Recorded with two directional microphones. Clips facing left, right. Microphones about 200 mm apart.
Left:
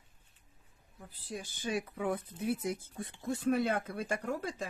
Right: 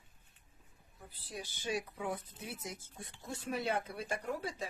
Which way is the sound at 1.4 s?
55° left (ahead or behind).